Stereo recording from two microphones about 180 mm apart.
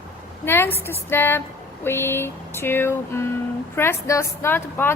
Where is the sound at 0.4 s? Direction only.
10° left (ahead or behind).